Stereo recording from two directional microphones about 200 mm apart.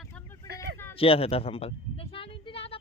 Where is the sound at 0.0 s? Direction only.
10° left (ahead or behind).